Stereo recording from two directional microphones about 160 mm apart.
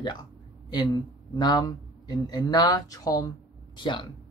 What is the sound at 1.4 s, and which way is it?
Speech, 25° left (ahead or behind).